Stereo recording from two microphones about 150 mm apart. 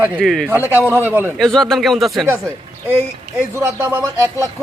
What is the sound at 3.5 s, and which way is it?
Speech, 15° right (ahead or behind).